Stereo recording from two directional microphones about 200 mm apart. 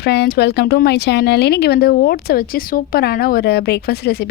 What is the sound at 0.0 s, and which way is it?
Speech, 55° left (ahead or behind).